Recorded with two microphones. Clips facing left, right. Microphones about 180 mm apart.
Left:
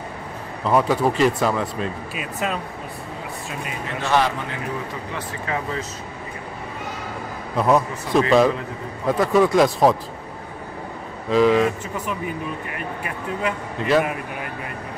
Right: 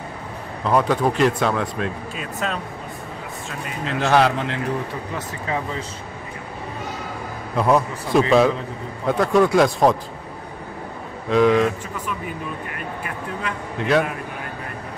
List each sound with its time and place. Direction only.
0.7 s speech: 5° left (ahead or behind)
3.8 s a man's voice: 90° right
7.5 s speech: centre (ahead or behind)
11.2 s speech: centre (ahead or behind)
13.7 s speech: centre (ahead or behind)